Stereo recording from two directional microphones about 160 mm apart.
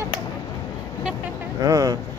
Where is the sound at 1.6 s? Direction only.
20° right (ahead or behind).